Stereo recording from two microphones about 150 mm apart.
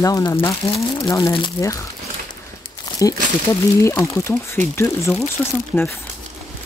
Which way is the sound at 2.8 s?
25° left (ahead or behind).